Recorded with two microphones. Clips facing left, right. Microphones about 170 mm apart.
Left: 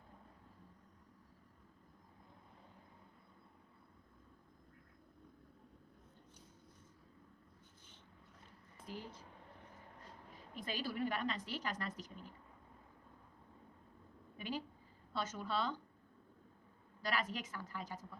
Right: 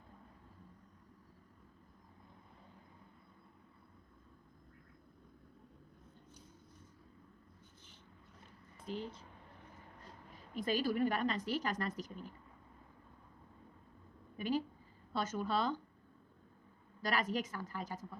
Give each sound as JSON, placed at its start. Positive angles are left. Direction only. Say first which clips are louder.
{"t": 8.9, "sound": "speech", "louder": "right 6 dB", "side_deg": -20}
{"t": 10.5, "sound": "a woman's voice", "louder": "right 8 dB", "side_deg": -45}
{"t": 14.3, "sound": "a woman's voice", "louder": "right 7 dB", "side_deg": -45}
{"t": 17.0, "sound": "a woman's voice", "louder": "right 4 dB", "side_deg": -45}